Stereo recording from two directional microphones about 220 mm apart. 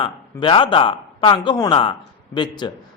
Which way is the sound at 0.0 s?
25° left (ahead or behind).